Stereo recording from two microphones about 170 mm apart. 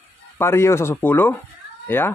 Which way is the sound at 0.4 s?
15° left (ahead or behind).